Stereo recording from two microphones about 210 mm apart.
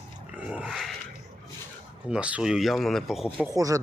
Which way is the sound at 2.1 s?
5° right (ahead or behind).